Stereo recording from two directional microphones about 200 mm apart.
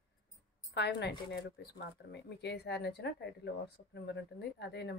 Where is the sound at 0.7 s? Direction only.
55° left (ahead or behind).